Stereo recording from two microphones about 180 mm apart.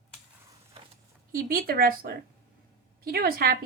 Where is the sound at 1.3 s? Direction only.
55° right (ahead or behind).